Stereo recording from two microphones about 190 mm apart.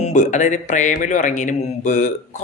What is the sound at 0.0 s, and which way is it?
A woman's voice, 40° left (ahead or behind).